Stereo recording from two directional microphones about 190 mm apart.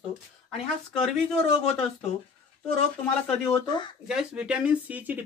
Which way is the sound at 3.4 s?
25° left (ahead or behind).